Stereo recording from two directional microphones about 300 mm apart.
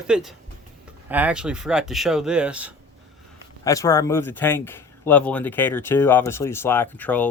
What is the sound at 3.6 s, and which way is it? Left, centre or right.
Speech, centre.